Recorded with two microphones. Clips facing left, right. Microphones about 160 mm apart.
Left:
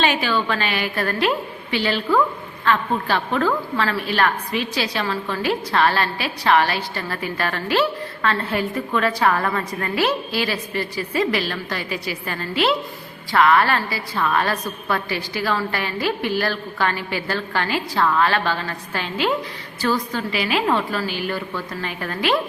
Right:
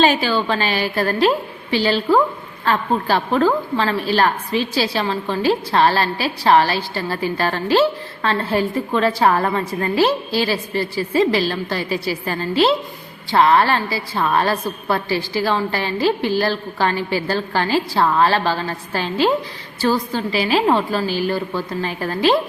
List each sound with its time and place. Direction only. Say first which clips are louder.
0.0 s a woman's voice: right 4 dB; 35° right (ahead or behind)